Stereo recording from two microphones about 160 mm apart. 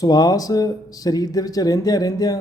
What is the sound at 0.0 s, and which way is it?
Speech, 25° left (ahead or behind).